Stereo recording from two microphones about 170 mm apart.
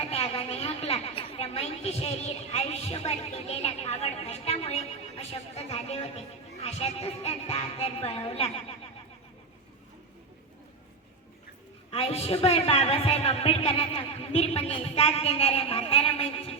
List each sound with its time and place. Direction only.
0.0 s a woman's voice: 35° left (ahead or behind)
11.9 s a woman's voice: 35° left (ahead or behind)